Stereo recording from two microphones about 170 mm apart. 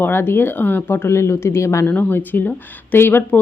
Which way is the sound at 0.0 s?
15° left (ahead or behind).